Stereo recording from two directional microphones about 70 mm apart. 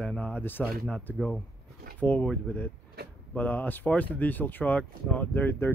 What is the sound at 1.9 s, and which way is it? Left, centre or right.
Speech, left.